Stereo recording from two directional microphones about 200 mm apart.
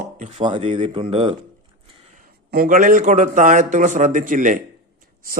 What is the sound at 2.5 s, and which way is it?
Speech, 45° right (ahead or behind).